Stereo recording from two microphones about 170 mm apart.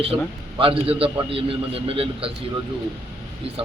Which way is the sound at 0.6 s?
30° right (ahead or behind).